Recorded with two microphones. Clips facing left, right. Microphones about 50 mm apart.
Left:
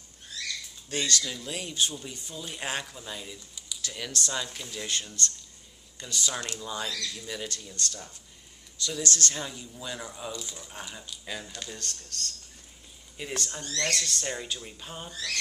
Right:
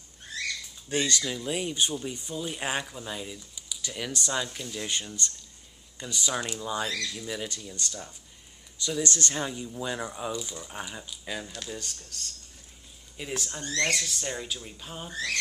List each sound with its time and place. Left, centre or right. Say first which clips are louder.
0.8 s speech: right 2 dB; centre
4.8 s speech: left 2 dB; centre
6.9 s speech: right 2 dB; right
7.2 s speech: right 2 dB; centre
15.0 s speech: right 5 dB; right